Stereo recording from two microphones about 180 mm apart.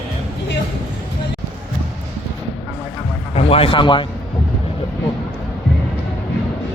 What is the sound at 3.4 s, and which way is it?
Speech, 30° left (ahead or behind).